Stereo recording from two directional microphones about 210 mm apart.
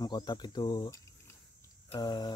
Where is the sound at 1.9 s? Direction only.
20° left (ahead or behind).